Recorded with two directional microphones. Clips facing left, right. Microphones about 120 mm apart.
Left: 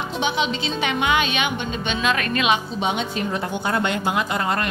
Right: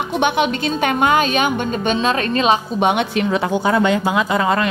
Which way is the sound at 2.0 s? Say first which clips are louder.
Right 4 dB; 30° right (ahead or behind).